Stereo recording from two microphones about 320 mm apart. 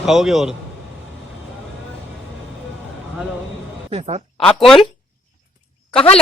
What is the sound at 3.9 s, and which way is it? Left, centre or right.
Speech, centre.